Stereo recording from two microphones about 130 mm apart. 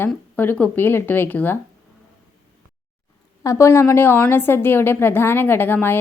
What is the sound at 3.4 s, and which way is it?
A woman's voice, 25° left (ahead or behind).